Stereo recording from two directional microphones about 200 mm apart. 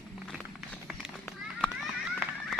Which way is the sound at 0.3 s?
5° left (ahead or behind).